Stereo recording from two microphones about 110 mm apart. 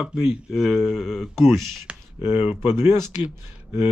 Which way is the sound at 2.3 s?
20° right (ahead or behind).